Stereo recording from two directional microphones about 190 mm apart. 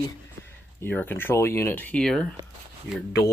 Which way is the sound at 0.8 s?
10° left (ahead or behind).